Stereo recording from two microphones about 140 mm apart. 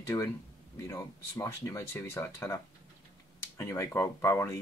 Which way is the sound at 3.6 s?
20° left (ahead or behind).